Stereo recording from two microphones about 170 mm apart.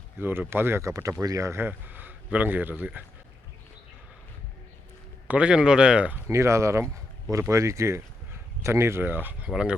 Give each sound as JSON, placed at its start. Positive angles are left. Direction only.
{"t": 0.2, "sound": "speech", "side_deg": -15}
{"t": 5.3, "sound": "speech", "side_deg": -5}
{"t": 6.2, "sound": "speech", "side_deg": -15}